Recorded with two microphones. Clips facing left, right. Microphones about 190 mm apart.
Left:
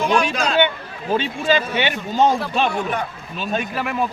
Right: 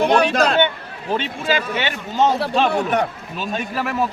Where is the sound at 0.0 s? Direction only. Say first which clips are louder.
Right 4 dB; 65° right (ahead or behind).